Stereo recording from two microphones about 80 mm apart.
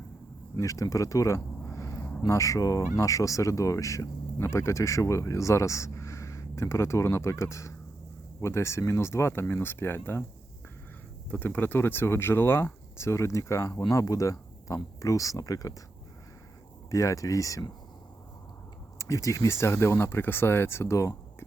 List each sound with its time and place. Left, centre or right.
0.5 s speech: left
2.0 s a sound: centre
2.2 s speech: left
11.3 s speech: left
13.7 s speech: left
16.9 s speech: left
18.9 s speech: left